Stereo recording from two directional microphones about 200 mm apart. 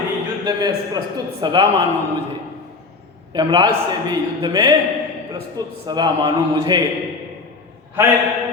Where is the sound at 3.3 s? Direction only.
20° right (ahead or behind).